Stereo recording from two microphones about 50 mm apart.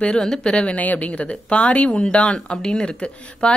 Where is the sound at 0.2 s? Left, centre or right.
Centre.